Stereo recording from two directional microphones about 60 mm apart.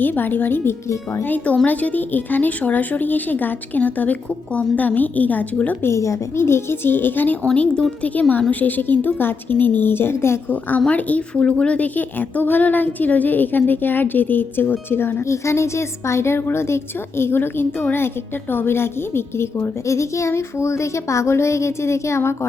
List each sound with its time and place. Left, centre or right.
0.0 s a woman's voice: left
5.8 s a child's voice: left
6.4 s a woman's voice: left
7.5 s a woman's voice: centre; by 10.4 s left
10.5 s a woman's voice: left
15.3 s a child's voice: left